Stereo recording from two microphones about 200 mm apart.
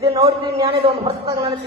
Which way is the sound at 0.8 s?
30° right (ahead or behind).